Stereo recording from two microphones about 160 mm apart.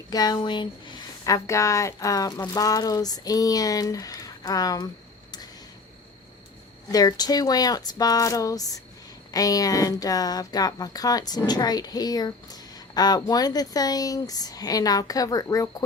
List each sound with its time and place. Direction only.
0.1 s speech: 25° left (ahead or behind)
6.9 s speech: 25° left (ahead or behind)